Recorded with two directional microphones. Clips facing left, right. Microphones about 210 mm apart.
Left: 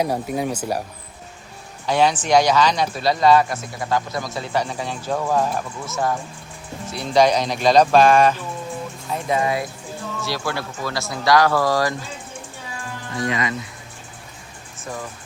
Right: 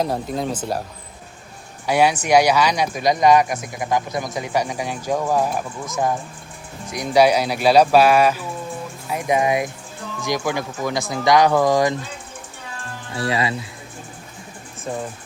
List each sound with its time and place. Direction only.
0.0 s speech: 10° left (ahead or behind)
1.9 s speech: 10° right (ahead or behind)
13.1 s speech: 35° right (ahead or behind)